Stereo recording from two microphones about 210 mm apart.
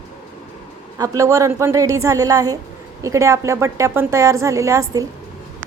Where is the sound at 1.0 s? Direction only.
15° right (ahead or behind).